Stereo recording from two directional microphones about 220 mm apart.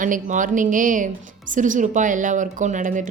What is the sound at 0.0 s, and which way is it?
A woman's voice, 35° right (ahead or behind).